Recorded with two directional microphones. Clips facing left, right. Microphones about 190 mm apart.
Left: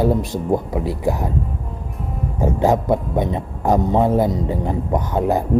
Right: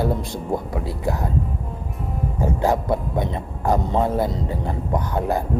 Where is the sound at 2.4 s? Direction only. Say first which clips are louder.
Left 4 dB; 15° left (ahead or behind).